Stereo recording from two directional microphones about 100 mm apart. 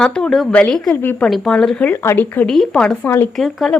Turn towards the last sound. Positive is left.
turn(degrees=0)  # may be behind; listen again after turning